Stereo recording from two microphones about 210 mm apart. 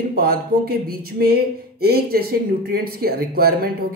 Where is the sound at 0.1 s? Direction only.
45° right (ahead or behind).